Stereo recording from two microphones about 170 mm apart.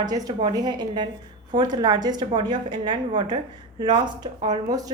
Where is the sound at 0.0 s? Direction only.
25° right (ahead or behind).